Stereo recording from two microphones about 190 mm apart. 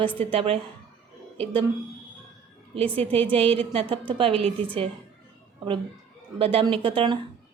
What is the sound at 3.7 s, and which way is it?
Speech, 25° right (ahead or behind).